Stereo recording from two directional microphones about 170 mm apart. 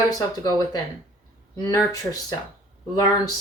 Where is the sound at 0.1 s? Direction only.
20° left (ahead or behind).